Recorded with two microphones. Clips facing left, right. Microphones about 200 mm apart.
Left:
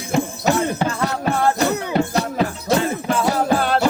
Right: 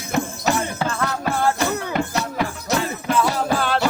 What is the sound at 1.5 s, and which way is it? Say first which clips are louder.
Music: left 3 dB; 35° left (ahead or behind).